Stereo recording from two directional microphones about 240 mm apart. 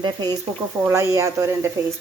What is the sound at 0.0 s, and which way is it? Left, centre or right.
Speech, centre.